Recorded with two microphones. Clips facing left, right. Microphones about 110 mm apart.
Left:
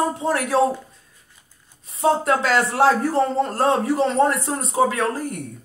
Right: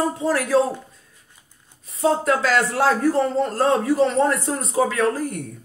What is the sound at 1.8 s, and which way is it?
A man's voice, 25° left (ahead or behind).